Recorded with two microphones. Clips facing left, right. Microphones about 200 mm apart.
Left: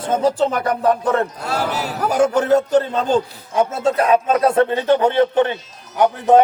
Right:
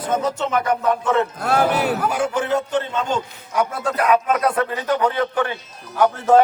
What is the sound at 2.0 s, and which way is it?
A man's voice, 40° left (ahead or behind).